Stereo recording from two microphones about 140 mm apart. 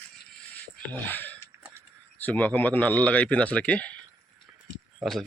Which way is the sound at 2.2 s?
10° left (ahead or behind).